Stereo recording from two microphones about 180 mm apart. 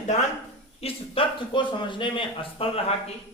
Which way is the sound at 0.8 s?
30° left (ahead or behind).